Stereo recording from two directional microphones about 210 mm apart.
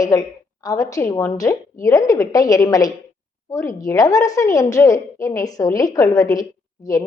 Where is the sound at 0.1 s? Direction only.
15° left (ahead or behind).